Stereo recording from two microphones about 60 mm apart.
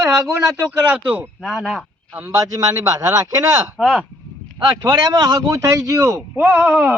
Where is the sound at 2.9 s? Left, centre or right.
Right.